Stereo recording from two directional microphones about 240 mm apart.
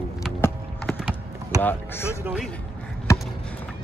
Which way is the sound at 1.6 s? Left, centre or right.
Centre.